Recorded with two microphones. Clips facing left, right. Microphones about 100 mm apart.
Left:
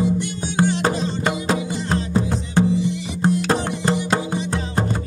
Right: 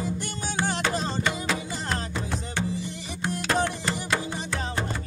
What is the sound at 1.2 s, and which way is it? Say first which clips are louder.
Music: left 6 dB; 40° left (ahead or behind).